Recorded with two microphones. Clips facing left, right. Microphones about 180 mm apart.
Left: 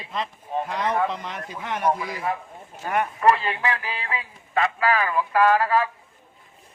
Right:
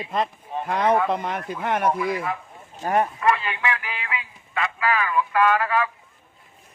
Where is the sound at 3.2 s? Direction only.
35° left (ahead or behind).